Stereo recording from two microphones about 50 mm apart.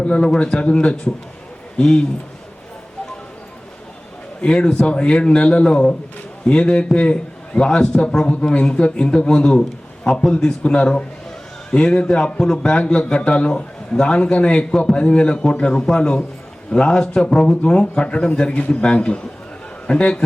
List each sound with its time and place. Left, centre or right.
0.0 s a man's voice: left
4.4 s a man's voice: centre
12.7 s a man's voice: left